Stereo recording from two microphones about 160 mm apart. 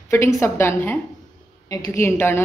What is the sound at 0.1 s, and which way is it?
A woman's voice, 15° left (ahead or behind).